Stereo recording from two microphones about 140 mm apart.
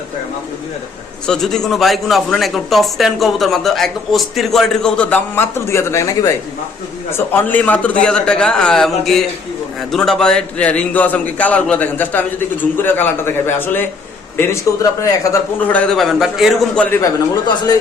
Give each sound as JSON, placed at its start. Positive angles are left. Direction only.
{"t": 1.3, "sound": "a man's voice", "side_deg": 5}
{"t": 15.7, "sound": "speech", "side_deg": 5}
{"t": 16.8, "sound": "a man's voice", "side_deg": 15}